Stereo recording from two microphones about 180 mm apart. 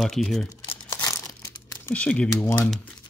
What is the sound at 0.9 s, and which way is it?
Crumpling, 15° left (ahead or behind).